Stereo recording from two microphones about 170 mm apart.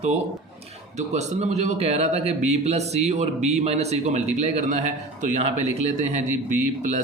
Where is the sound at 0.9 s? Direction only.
40° right (ahead or behind).